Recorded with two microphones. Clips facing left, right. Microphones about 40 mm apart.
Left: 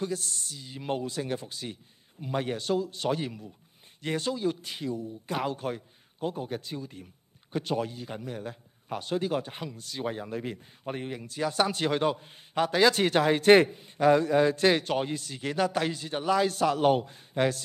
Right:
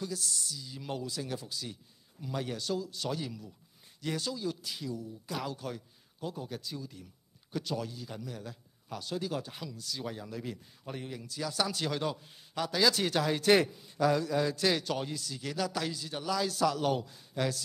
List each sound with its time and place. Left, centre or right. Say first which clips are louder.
0.0 s a man's voice: left 4 dB; left